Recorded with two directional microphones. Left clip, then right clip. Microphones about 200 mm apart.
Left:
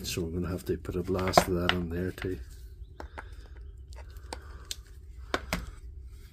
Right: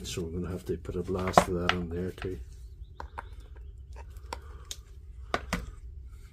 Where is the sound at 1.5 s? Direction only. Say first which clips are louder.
Left 1 dB; 35° left (ahead or behind).